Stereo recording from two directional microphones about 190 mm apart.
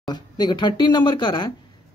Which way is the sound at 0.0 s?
25° left (ahead or behind).